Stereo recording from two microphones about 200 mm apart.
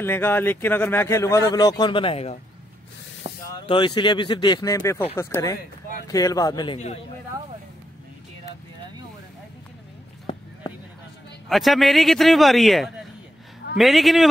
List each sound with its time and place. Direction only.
0.0 s a man's voice: 10° left (ahead or behind); by 2.3 s 30° left (ahead or behind)
3.5 s a man's voice: 25° left (ahead or behind)
10.3 s a sound: 25° left (ahead or behind)
11.4 s a man's voice: centre (ahead or behind)